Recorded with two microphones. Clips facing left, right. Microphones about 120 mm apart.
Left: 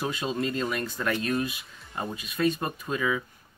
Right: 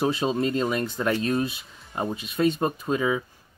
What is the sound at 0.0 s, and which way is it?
Speech, 30° right (ahead or behind).